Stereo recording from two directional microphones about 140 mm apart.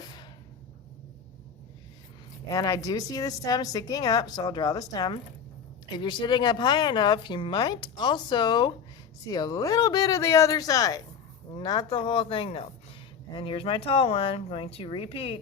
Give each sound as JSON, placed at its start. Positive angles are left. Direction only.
{"t": 2.5, "sound": "a woman's voice", "side_deg": 25}